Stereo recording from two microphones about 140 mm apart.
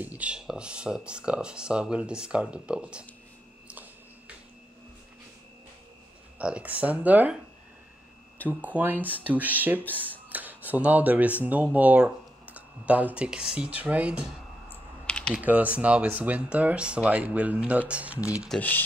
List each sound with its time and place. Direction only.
0.0 s speech: 10° right (ahead or behind)
6.3 s speech: 10° right (ahead or behind)
8.5 s speech: 10° right (ahead or behind)
9.8 s speech: 10° left (ahead or behind)
10.1 s a sound: 10° right (ahead or behind)
11.4 s speech: 10° right (ahead or behind)
14.7 s computer keyboard: 5° left (ahead or behind)
15.3 s speech: 10° right (ahead or behind)
18.5 s speech: 10° left (ahead or behind)